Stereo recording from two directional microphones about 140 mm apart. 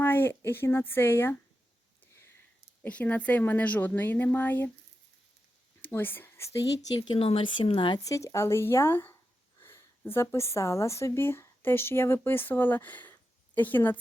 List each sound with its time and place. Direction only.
0.0 s a woman's voice: 15° left (ahead or behind)
2.8 s a woman's voice: 10° left (ahead or behind)
5.8 s speech: 15° left (ahead or behind)
7.1 s a woman's voice: 40° left (ahead or behind); by 14.0 s 15° left (ahead or behind)